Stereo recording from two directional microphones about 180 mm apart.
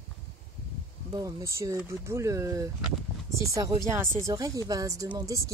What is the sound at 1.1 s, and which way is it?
Speech, 20° right (ahead or behind).